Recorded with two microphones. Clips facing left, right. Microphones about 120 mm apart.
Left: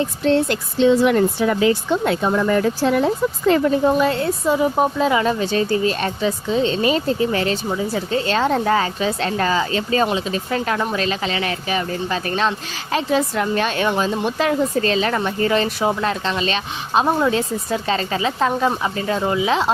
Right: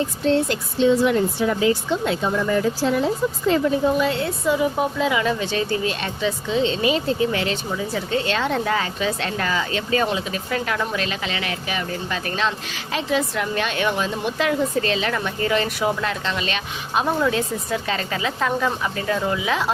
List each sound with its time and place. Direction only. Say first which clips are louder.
0.3 s speech: left 2 dB; 65° left (ahead or behind); by 19.7 s 25° left (ahead or behind)